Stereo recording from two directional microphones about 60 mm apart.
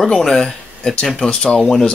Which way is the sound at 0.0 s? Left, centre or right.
Centre.